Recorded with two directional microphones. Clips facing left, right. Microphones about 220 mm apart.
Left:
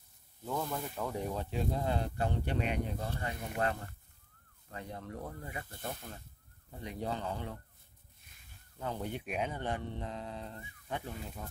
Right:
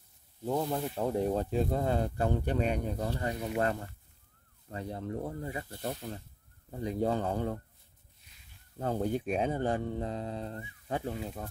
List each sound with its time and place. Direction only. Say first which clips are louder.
0.5 s speech: right 6 dB; 25° right (ahead or behind)
1.1 s speech: right 9 dB; 40° right (ahead or behind)
4.6 s speech: right 6 dB; 35° right (ahead or behind)
5.9 s speech: right 7 dB; 50° right (ahead or behind)
6.8 s speech: right 8 dB; 40° right (ahead or behind)
8.7 s speech: right 7 dB; 40° right (ahead or behind)